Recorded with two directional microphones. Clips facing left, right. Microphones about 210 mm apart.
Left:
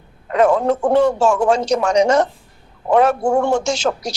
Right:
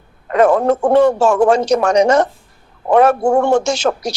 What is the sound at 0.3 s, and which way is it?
A man's voice, 60° right (ahead or behind).